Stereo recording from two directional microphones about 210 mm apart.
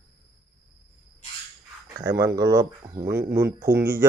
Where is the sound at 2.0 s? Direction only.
15° right (ahead or behind).